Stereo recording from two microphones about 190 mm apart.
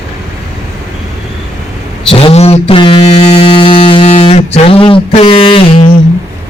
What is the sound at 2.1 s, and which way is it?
Mantra, 30° left (ahead or behind).